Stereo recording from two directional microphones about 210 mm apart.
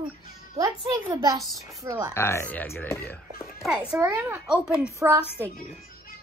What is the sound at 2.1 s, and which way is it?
Speech, 10° left (ahead or behind).